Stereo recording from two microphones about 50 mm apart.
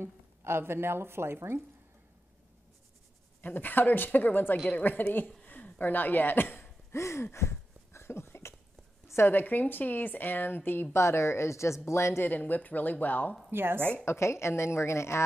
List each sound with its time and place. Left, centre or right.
0.0 s speech: right
3.3 s speech: left
5.4 s a sound: left
6.9 s a sound: left
9.3 s speech: left
10.9 s a woman's voice: left
12.2 s speech: left
13.5 s a woman's voice: right
13.7 s a woman's voice: left
14.0 s a woman's voice: left